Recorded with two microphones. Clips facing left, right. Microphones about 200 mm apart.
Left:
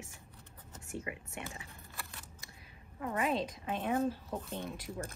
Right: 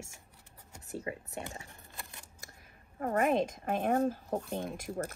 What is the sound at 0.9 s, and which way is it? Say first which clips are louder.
Speech: right 3 dB; 35° right (ahead or behind).